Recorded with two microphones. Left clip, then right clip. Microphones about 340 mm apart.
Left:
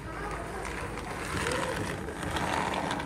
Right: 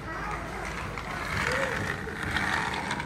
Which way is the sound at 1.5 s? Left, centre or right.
Left.